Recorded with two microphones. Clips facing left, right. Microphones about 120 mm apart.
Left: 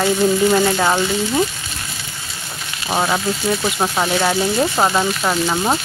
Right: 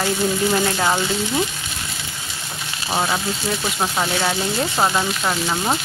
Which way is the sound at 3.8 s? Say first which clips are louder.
Left 2 dB; 10° left (ahead or behind).